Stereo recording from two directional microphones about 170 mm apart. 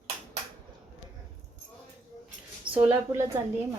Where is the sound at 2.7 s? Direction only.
10° right (ahead or behind).